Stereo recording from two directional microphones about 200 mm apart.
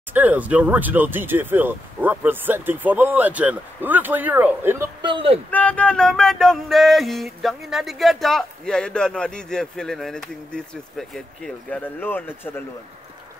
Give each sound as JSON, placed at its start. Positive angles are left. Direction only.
{"t": 0.1, "sound": "speech", "side_deg": -10}
{"t": 5.0, "sound": "speech", "side_deg": -25}
{"t": 5.5, "sound": "music", "side_deg": 5}